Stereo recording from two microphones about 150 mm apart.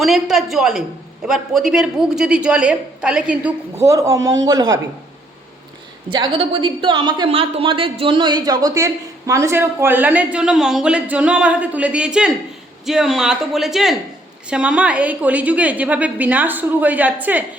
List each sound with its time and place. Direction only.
0.0 s a man's voice: centre (ahead or behind)
3.8 s a man's voice: 20° right (ahead or behind)
6.1 s a woman's voice: 30° right (ahead or behind); by 17.4 s 10° right (ahead or behind)